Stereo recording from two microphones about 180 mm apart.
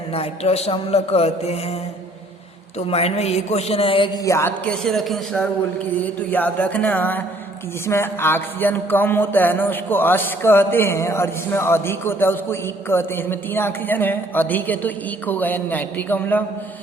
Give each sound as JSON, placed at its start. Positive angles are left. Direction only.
{"t": 0.1, "sound": "speech", "side_deg": 35}
{"t": 2.7, "sound": "a woman's voice", "side_deg": 35}